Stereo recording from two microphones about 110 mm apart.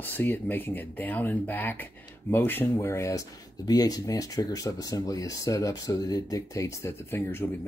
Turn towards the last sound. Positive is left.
turn(degrees=20)  # may be behind; listen again after turning